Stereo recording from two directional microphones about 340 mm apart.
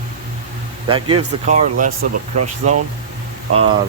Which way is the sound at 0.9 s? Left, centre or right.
Centre.